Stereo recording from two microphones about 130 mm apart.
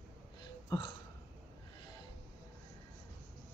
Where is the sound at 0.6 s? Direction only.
35° left (ahead or behind).